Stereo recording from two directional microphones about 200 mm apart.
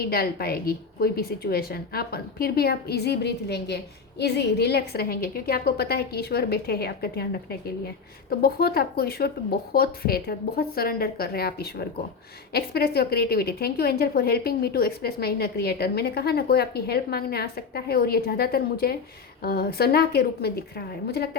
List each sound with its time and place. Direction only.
0.0 s a woman's voice: 50° left (ahead or behind)